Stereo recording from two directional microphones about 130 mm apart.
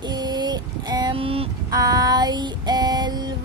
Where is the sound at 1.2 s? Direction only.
45° right (ahead or behind).